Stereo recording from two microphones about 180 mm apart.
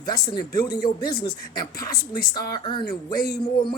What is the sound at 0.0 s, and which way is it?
Speech, 25° left (ahead or behind).